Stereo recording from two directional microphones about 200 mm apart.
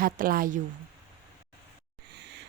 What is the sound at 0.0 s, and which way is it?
Speech, 45° right (ahead or behind).